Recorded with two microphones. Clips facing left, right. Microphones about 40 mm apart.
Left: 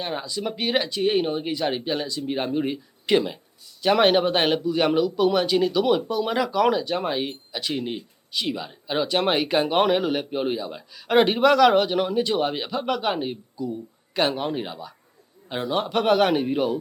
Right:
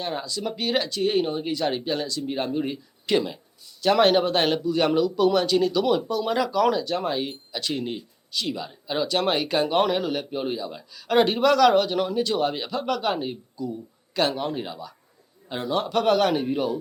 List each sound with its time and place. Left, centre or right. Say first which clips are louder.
0.0 s speech: left 1 dB; centre